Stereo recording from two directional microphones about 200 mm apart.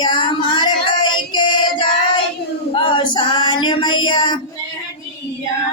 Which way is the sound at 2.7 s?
25° left (ahead or behind).